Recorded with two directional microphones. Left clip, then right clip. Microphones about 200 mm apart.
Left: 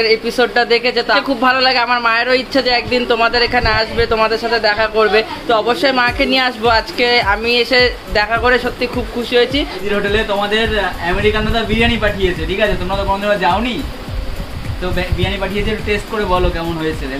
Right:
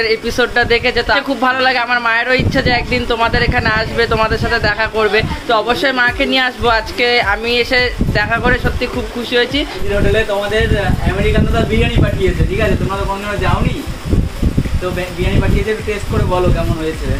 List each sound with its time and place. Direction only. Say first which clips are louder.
0.0 s a man's voice: left 1 dB; centre (ahead or behind)